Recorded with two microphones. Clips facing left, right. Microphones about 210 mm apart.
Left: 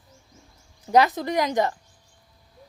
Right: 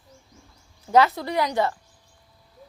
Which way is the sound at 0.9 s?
15° left (ahead or behind).